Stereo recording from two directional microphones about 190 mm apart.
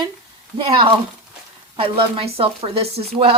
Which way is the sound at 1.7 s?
30° right (ahead or behind).